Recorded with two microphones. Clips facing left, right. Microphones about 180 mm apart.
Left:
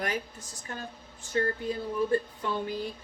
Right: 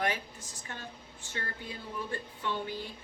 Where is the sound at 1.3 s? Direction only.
40° left (ahead or behind).